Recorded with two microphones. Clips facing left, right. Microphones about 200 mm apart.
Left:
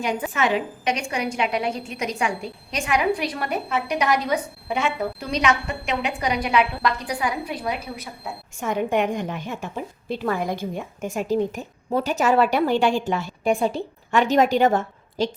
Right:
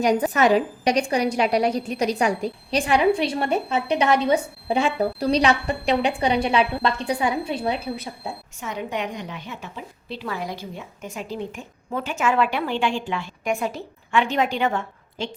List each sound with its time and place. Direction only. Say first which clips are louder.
0.0 s a woman's voice: right 5 dB; 40° right (ahead or behind)
8.6 s a woman's voice: left 6 dB; 50° left (ahead or behind)